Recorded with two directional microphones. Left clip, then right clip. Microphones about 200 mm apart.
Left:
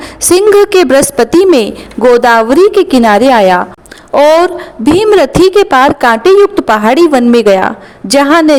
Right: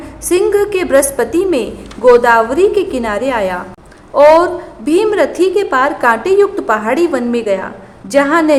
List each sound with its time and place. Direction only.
0.0 s a woman's voice: 45° left (ahead or behind)